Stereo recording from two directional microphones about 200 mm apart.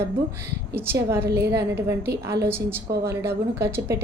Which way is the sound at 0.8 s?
10° right (ahead or behind).